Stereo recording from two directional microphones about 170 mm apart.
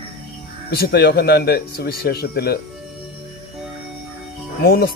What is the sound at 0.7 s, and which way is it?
Speech, 70° left (ahead or behind).